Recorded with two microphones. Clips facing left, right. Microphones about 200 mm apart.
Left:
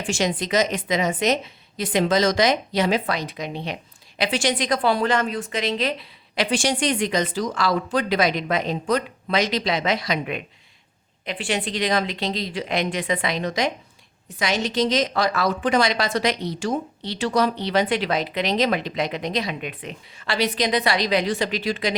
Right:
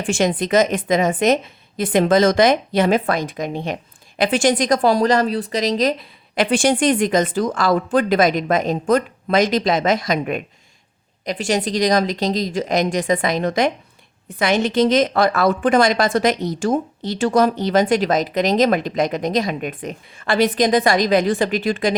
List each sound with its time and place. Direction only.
0.1 s a woman's voice: 50° right (ahead or behind)